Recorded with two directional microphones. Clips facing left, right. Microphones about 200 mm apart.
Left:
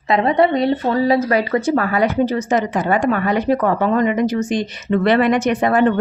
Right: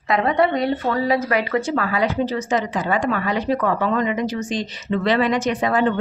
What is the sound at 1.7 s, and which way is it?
A woman's voice, 50° left (ahead or behind).